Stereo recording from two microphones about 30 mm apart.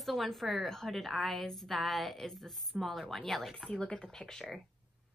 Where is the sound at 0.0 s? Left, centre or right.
Centre.